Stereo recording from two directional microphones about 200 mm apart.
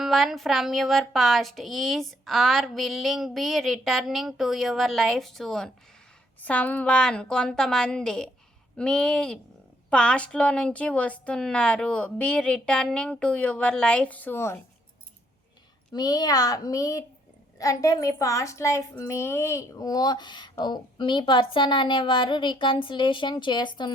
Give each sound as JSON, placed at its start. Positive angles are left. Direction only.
{"t": 0.0, "sound": "a woman's voice", "side_deg": 0}
{"t": 15.9, "sound": "a woman's voice", "side_deg": 20}